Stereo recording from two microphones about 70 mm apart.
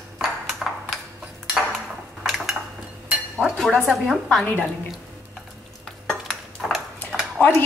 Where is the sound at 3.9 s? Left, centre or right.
Centre.